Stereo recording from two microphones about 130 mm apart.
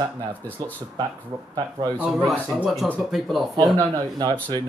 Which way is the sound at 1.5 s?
30° right (ahead or behind).